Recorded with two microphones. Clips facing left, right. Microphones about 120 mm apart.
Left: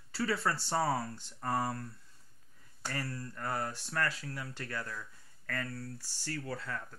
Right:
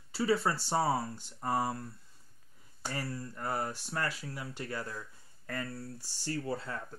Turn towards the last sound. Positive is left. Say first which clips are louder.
# right 3 dB
turn(degrees=-25)  # may be behind; listen again after turning